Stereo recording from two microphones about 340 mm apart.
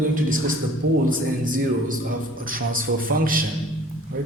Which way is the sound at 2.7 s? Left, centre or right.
Right.